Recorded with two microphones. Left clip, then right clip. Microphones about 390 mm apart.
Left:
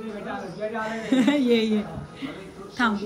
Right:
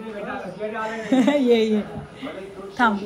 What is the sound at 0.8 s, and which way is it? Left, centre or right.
A woman's voice, centre.